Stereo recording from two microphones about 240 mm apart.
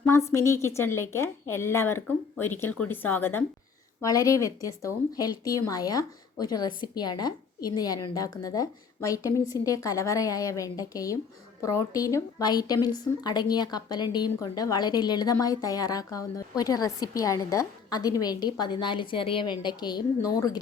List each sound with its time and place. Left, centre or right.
0.0 s a woman's voice: centre